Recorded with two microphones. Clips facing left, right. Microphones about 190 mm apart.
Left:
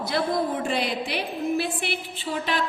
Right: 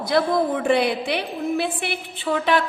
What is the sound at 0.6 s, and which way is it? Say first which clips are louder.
A woman's voice: right 7 dB; 60° right (ahead or behind).